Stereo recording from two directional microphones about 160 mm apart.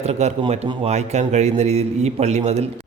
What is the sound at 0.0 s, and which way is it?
A man's voice, 45° right (ahead or behind).